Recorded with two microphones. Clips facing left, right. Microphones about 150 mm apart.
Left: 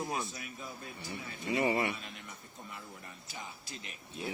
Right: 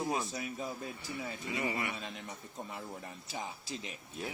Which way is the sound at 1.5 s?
30° left (ahead or behind).